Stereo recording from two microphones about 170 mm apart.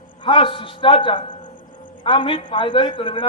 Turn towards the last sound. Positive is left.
turn(degrees=30)  # may be behind; listen again after turning